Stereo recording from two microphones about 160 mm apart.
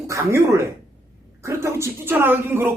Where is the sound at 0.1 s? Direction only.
20° right (ahead or behind).